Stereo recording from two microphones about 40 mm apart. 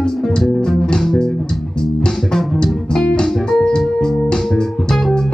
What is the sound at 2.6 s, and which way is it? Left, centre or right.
Music, centre.